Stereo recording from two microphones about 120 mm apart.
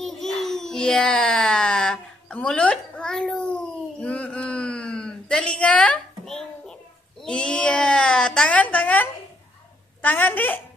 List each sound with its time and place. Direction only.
0.0 s baby cry: centre (ahead or behind)
10.0 s a woman's voice: 15° left (ahead or behind)